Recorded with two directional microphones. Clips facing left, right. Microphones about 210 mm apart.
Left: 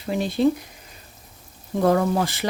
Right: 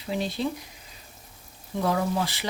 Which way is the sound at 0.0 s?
55° left (ahead or behind).